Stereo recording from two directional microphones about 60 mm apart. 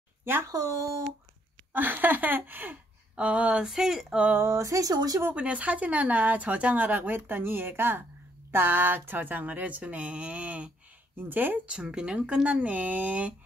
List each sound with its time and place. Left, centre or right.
0.2 s speech: right
0.5 s speech: right
1.7 s speech: right
3.2 s speech: centre
3.6 s speech: centre
4.6 s speech: right
5.3 s speech: right
11.1 s speech: right
11.6 s speech: centre